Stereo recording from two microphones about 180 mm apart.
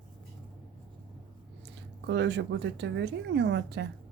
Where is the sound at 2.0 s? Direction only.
75° right (ahead or behind).